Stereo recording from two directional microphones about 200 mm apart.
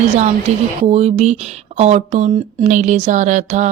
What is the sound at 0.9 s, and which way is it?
Speech, 30° right (ahead or behind).